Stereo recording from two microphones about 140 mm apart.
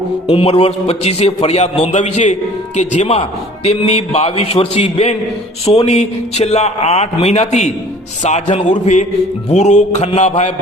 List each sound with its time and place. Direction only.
0.3 s a man's voice: 45° left (ahead or behind)